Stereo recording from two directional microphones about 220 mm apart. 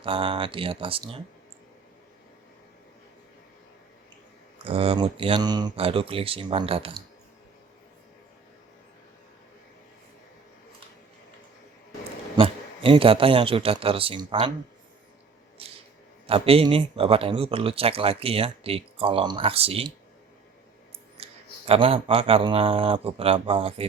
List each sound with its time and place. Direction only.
0.0 s speech: 25° right (ahead or behind)
4.6 s speech: 25° right (ahead or behind)
12.4 s speech: 25° right (ahead or behind)
16.2 s speech: 25° right (ahead or behind)
21.7 s speech: 25° right (ahead or behind)